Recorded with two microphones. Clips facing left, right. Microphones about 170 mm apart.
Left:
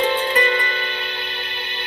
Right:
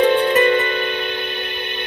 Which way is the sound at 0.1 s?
55° right (ahead or behind).